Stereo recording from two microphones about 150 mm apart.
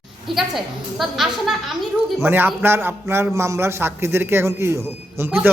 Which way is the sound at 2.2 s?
15° right (ahead or behind).